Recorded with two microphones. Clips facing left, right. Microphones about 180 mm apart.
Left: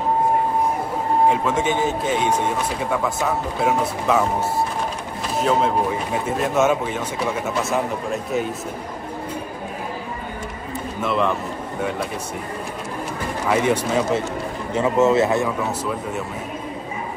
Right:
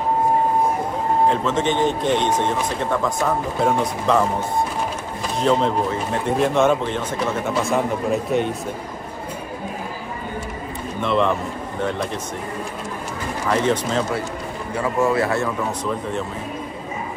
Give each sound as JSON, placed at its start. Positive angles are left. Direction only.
{"t": 1.3, "sound": "speech", "side_deg": 10}
{"t": 11.0, "sound": "speech", "side_deg": 5}
{"t": 13.5, "sound": "speech", "side_deg": 10}
{"t": 14.7, "sound": "speech", "side_deg": 25}
{"t": 15.9, "sound": "speech", "side_deg": 5}